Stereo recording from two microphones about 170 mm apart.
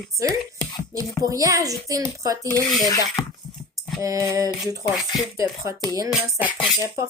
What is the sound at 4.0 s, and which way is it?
Speech, 20° right (ahead or behind).